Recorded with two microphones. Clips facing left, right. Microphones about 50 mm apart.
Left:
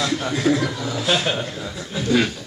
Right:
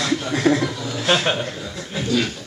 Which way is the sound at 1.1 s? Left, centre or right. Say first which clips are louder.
Right 2 dB; right.